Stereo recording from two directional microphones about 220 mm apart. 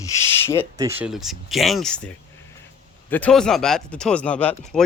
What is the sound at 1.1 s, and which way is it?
Speech, centre (ahead or behind).